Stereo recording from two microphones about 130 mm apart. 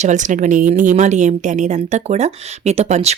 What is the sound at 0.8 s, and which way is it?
A woman's voice, 70° right (ahead or behind).